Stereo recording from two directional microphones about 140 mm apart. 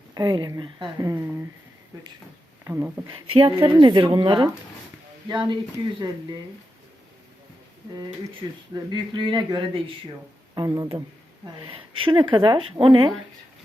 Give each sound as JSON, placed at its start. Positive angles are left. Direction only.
{"t": 0.1, "sound": "speech", "side_deg": -30}
{"t": 2.6, "sound": "speech", "side_deg": -20}
{"t": 3.1, "sound": "speech", "side_deg": -40}
{"t": 7.9, "sound": "speech", "side_deg": -30}
{"t": 11.4, "sound": "speech", "side_deg": -40}